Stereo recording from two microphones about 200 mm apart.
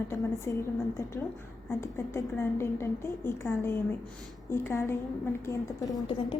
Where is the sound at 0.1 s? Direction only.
15° left (ahead or behind).